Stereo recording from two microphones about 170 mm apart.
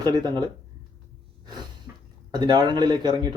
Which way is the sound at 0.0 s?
25° right (ahead or behind).